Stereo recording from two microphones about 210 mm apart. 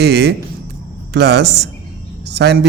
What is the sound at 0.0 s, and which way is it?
A man's voice, 50° right (ahead or behind).